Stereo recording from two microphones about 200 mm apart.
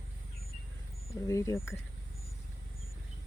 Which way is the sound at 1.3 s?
15° left (ahead or behind).